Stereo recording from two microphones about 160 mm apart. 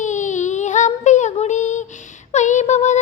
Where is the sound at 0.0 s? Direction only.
50° left (ahead or behind).